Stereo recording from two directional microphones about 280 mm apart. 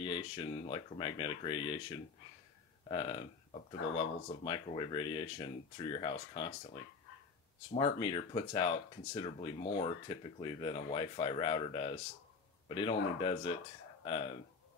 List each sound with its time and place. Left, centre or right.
0.0 s speech: centre
2.9 s speech: centre